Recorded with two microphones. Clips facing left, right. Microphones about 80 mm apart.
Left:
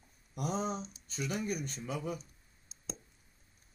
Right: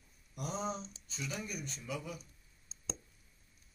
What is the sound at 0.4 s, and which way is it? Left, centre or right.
A man's voice, left.